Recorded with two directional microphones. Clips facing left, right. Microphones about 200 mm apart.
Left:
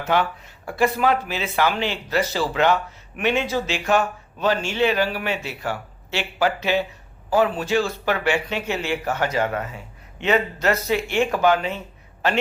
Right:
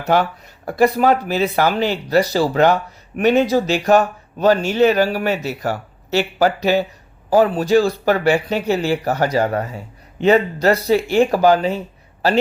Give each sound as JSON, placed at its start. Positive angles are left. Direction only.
{"t": 0.0, "sound": "speech", "side_deg": -40}